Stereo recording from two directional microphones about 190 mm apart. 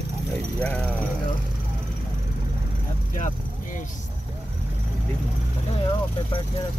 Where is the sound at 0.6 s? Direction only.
5° left (ahead or behind).